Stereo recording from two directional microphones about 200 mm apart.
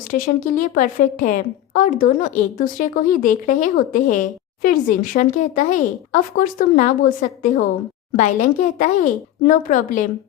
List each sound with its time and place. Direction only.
0.1 s a woman's voice: 45° left (ahead or behind)